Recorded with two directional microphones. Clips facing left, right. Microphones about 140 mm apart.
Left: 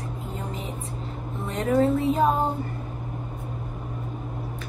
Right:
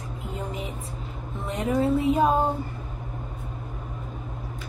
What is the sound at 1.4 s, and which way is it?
Speech, 10° right (ahead or behind).